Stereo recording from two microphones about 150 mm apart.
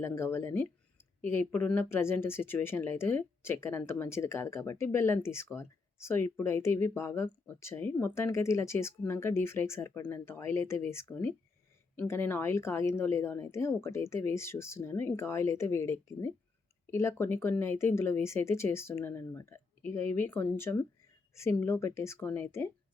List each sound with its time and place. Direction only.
0.0 s speech: 15° left (ahead or behind)